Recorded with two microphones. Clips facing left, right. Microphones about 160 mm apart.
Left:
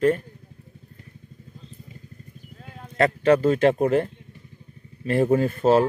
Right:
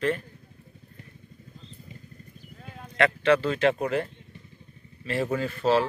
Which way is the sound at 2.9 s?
40° left (ahead or behind).